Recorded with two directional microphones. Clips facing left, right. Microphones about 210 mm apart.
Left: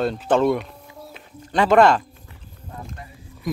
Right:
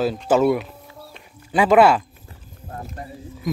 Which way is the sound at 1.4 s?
10° right (ahead or behind).